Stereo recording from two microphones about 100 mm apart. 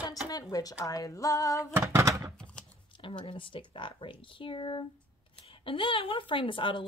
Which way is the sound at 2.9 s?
60° left (ahead or behind).